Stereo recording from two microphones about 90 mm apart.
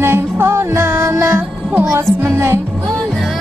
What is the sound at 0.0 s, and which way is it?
Music, 30° right (ahead or behind).